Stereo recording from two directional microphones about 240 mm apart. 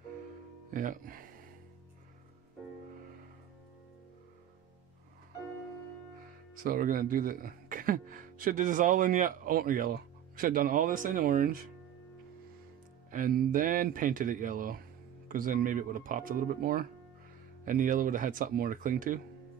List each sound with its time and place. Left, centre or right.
0.7 s speech: right
6.6 s speech: right
13.1 s speech: right